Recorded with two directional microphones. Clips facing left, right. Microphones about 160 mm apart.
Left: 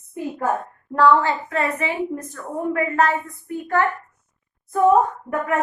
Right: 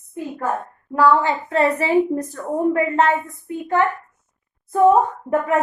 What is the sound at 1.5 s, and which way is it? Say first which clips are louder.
A woman's voice: right 7 dB; 30° right (ahead or behind).